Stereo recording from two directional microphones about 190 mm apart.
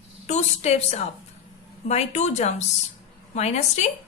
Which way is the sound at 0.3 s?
35° left (ahead or behind).